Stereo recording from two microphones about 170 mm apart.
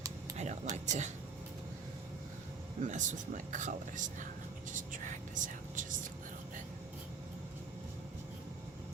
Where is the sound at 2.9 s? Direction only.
45° right (ahead or behind).